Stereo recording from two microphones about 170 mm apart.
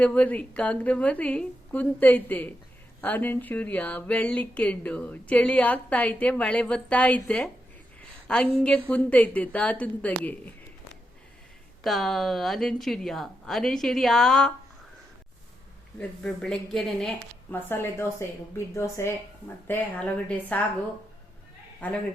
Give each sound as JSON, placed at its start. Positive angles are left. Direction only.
{"t": 0.0, "sound": "speech", "side_deg": 10}
{"t": 11.8, "sound": "speech", "side_deg": 0}
{"t": 16.0, "sound": "speech", "side_deg": 5}
{"t": 17.5, "sound": "speech", "side_deg": 15}
{"t": 21.8, "sound": "speech", "side_deg": 10}